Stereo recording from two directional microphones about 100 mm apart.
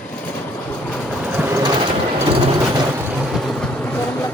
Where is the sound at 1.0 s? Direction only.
5° right (ahead or behind).